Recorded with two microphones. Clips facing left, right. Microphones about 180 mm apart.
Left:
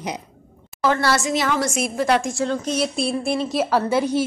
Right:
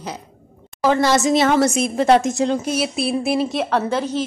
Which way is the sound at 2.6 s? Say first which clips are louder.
Right 1 dB; 5° right (ahead or behind).